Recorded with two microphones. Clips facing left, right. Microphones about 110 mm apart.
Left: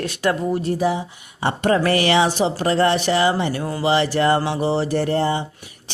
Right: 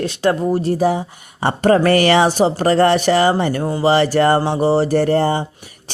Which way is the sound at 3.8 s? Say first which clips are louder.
Right 4 dB; 45° right (ahead or behind).